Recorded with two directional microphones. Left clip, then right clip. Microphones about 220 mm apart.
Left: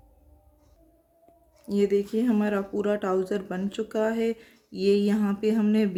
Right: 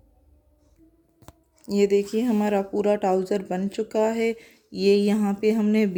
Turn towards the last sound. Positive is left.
turn(degrees=-15)  # may be behind; listen again after turning